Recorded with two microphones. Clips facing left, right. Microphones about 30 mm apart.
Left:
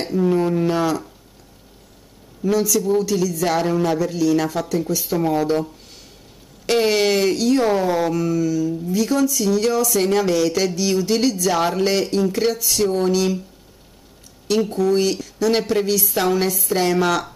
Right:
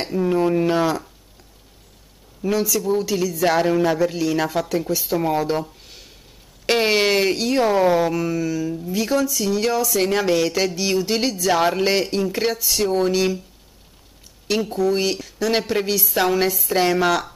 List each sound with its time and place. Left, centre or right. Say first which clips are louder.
0.0 s speech: left 1 dB; centre
2.4 s speech: left 2 dB; centre
6.6 s speech: left 1 dB; right
14.6 s speech: left 2 dB; centre
15.0 s speech: left 2 dB; centre